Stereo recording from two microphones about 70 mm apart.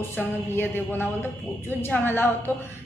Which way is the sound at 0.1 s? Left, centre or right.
Left.